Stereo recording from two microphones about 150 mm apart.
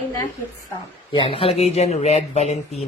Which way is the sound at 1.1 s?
35° left (ahead or behind).